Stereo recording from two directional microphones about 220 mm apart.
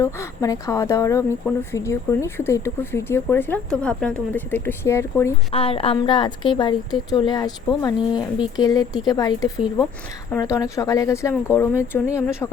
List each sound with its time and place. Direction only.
0.0 s speech: 15° left (ahead or behind)
5.5 s a woman's voice: 25° left (ahead or behind)